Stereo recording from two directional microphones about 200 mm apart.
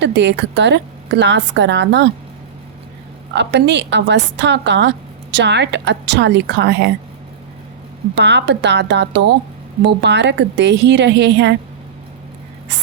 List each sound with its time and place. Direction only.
0.0 s a woman's voice: 60° right (ahead or behind)
3.3 s a woman's voice: 60° right (ahead or behind)
8.1 s a woman's voice: 60° right (ahead or behind)